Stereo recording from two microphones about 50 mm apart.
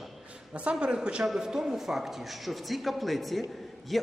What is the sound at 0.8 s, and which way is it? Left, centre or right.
A man's voice, centre.